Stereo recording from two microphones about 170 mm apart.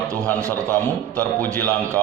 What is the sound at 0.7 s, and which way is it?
Speech, 10° left (ahead or behind).